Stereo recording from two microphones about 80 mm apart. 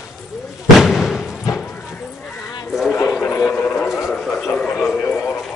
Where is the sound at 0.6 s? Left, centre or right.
Centre.